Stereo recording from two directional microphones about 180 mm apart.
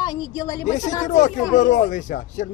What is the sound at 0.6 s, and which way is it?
Speech, 40° left (ahead or behind).